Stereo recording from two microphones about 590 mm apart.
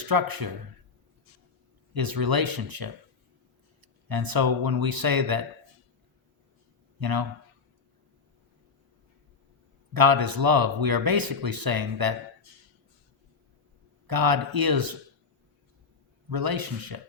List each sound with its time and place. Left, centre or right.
0.1 s speech: right
1.9 s speech: right
7.0 s speech: right
9.9 s speech: right
14.1 s speech: right
16.3 s speech: right